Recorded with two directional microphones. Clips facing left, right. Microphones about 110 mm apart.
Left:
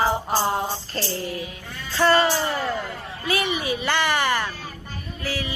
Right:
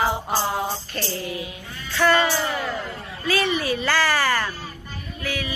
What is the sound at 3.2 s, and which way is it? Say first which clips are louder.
Speech: right 2 dB; 20° left (ahead or behind).